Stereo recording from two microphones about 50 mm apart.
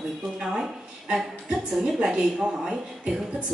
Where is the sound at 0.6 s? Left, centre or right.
Centre.